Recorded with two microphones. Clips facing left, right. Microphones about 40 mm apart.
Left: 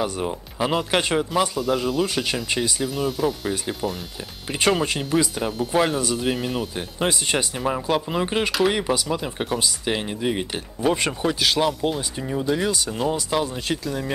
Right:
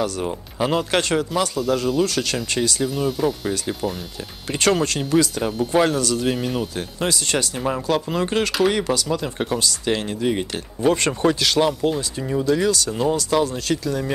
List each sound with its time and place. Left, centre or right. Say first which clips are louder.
0.2 s speech: right 1 dB; centre
2.0 s speech: right 1 dB; centre
2.8 s speech: right 2 dB; centre
4.5 s speech: right 1 dB; centre
5.4 s speech: right 2 dB; centre
5.9 s speech: right 2 dB; centre
6.2 s speech: right 2 dB; centre
6.7 s speech: even; centre
7.5 s speech: right 1 dB; centre